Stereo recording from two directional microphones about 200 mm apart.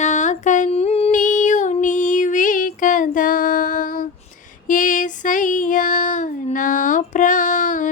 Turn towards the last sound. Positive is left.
turn(degrees=40)  # may be behind; listen again after turning